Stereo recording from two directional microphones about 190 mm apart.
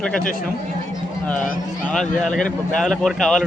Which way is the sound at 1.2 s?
5° left (ahead or behind).